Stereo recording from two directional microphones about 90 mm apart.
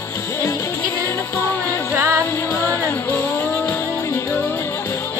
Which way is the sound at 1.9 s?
30° right (ahead or behind).